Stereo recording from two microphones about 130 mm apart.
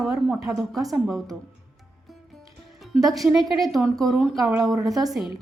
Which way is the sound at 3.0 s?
Centre (ahead or behind).